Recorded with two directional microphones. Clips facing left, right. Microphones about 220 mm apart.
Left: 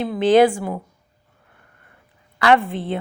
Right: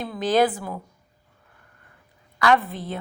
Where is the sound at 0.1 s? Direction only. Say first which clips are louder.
Left 6 dB; 25° left (ahead or behind).